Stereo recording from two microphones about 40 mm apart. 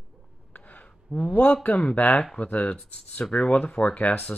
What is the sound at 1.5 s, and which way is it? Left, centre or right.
Speech, left.